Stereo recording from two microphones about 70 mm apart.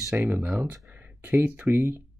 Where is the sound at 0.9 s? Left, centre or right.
Right.